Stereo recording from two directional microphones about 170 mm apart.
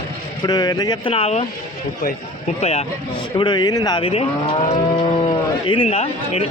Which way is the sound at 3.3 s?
25° left (ahead or behind).